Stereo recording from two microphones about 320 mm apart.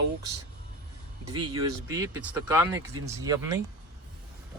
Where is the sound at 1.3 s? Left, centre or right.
Right.